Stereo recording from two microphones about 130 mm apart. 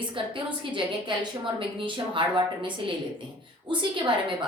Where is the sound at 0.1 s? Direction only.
40° right (ahead or behind).